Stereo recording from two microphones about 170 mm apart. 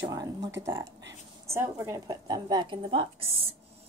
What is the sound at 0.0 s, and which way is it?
A woman's voice, 20° right (ahead or behind).